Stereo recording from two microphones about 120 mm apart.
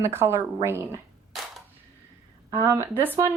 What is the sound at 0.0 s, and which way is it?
Speech, 20° right (ahead or behind).